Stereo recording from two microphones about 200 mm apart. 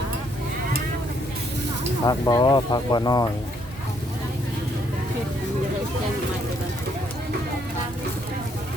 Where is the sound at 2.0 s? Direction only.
20° left (ahead or behind).